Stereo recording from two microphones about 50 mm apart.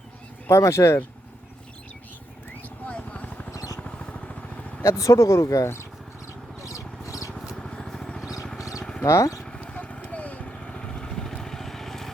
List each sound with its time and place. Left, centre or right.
0.4 s speech: left
2.8 s helicopter: left
3.8 s vehicle: centre
4.8 s speech: left
6.6 s a sound: left
7.5 s vehicle: centre
8.8 s a sound: centre
9.0 s speech: left
9.6 s vehicle: left
10.4 s vehicle: centre